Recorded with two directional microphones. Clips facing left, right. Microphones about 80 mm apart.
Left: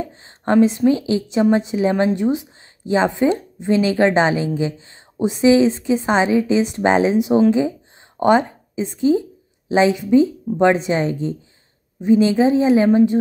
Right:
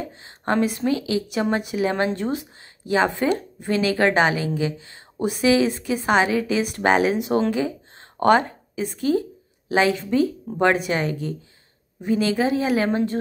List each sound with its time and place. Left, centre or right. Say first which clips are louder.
0.0 s a woman's voice: left 4 dB; left
8.2 s a sound: left 2 dB; centre
8.9 s a woman's voice: left 5 dB; left